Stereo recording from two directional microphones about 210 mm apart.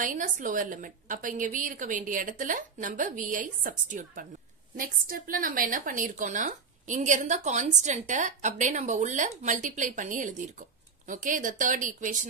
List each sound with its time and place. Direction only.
0.0 s a woman's voice: 40° right (ahead or behind)